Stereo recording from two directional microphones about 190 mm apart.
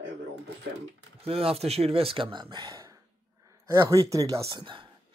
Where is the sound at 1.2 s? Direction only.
30° right (ahead or behind).